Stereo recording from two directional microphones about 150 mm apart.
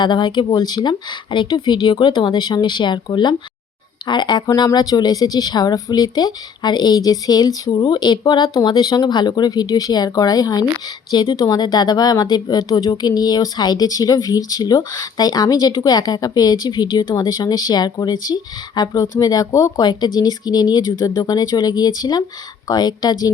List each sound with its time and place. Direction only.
0.0 s speech: 30° left (ahead or behind)